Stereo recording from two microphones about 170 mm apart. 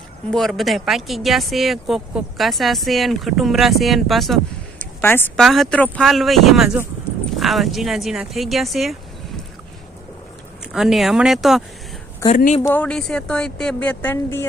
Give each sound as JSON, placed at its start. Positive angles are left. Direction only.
{"t": 0.3, "sound": "speech", "side_deg": 0}
{"t": 4.8, "sound": "a sound", "side_deg": 15}
{"t": 5.4, "sound": "speech", "side_deg": 0}
{"t": 10.7, "sound": "speech", "side_deg": 0}
{"t": 12.2, "sound": "speech", "side_deg": 15}